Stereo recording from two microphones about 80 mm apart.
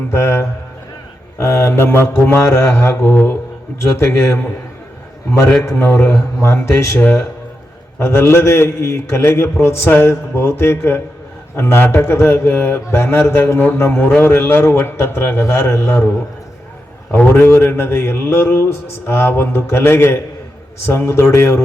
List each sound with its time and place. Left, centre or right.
0.1 s a man's voice: left
17.1 s a man's voice: left